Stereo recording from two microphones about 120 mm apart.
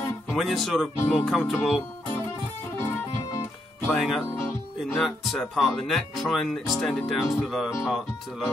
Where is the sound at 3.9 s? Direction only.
Centre (ahead or behind).